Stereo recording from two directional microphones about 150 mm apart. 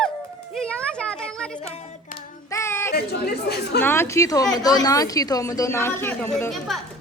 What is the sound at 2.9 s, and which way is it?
Speech, 90° left.